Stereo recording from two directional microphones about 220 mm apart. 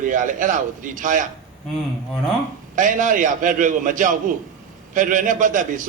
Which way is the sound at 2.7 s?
35° right (ahead or behind).